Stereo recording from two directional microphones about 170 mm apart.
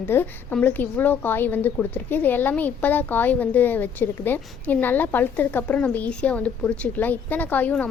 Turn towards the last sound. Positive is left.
turn(degrees=10)  # may be behind; listen again after turning